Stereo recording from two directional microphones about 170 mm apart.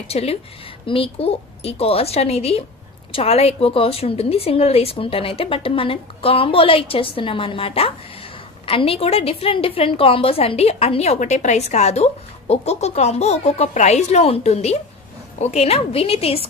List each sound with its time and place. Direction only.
0.1 s a woman's voice: 35° left (ahead or behind)